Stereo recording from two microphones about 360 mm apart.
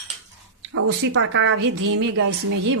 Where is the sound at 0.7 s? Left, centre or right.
Right.